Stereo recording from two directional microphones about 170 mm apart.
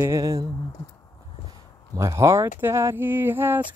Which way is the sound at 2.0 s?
20° right (ahead or behind).